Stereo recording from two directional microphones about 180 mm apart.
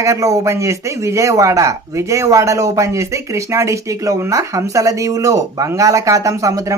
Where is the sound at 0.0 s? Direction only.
15° right (ahead or behind).